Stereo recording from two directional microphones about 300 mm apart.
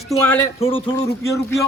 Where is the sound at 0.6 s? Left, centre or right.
Centre.